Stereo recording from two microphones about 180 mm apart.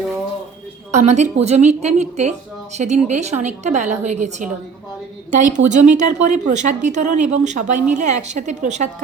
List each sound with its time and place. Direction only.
0.9 s speech: 40° right (ahead or behind)
5.5 s speech: 45° right (ahead or behind)